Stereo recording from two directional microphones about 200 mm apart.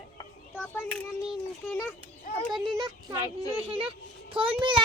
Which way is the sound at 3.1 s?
15° left (ahead or behind).